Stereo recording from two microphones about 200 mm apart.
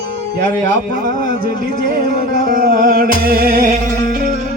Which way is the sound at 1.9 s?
45° right (ahead or behind).